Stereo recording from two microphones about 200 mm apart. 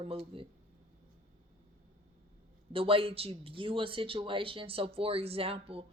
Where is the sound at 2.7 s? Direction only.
25° right (ahead or behind).